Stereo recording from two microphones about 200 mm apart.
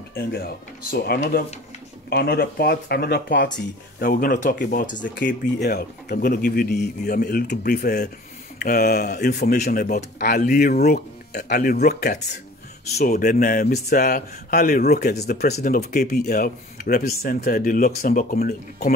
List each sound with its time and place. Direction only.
0.1 s speech: 50° left (ahead or behind)
15.4 s speech: 40° left (ahead or behind)